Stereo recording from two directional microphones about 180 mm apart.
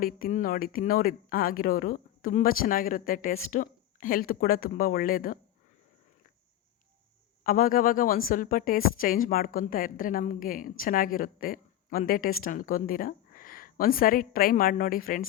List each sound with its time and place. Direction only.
0.0 s a woman's voice: 50° left (ahead or behind)
7.4 s a woman's voice: 50° left (ahead or behind)